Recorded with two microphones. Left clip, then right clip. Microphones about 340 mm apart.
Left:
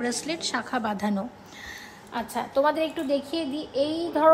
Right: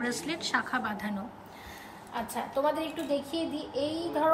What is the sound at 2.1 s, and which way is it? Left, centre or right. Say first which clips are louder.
A woman's voice: left 5 dB; left.